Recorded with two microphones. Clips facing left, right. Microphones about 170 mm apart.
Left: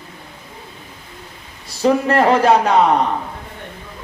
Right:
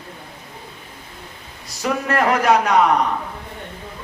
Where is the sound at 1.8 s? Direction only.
30° left (ahead or behind).